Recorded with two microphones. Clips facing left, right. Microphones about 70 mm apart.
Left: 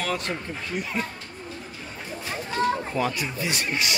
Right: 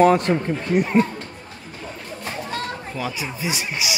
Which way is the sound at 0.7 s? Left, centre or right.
Right.